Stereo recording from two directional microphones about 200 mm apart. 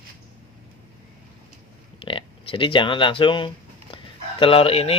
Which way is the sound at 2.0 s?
25° left (ahead or behind).